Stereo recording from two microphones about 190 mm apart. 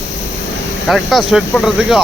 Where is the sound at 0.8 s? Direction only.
Centre (ahead or behind).